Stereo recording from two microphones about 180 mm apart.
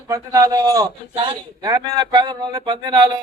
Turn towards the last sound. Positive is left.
turn(degrees=-25)  # may be behind; listen again after turning